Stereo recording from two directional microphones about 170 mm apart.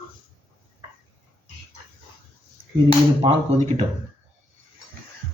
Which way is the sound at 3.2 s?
35° right (ahead or behind).